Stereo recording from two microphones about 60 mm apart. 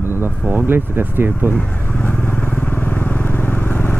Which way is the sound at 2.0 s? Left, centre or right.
Left.